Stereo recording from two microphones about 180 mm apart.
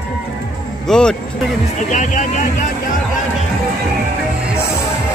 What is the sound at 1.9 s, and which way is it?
Speech, 40° left (ahead or behind).